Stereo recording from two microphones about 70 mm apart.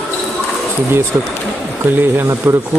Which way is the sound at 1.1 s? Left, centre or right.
Right.